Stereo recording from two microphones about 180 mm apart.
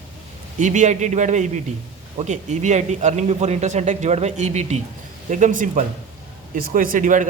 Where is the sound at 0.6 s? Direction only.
45° right (ahead or behind).